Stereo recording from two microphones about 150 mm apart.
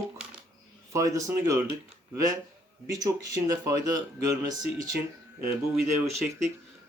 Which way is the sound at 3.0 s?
25° right (ahead or behind).